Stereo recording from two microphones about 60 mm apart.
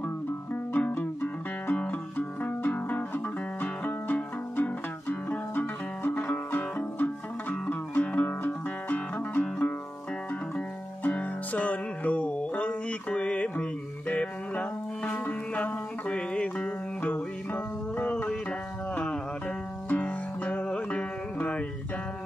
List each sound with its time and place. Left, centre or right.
0.7 s music: left
11.1 s music: left
19.9 s music: left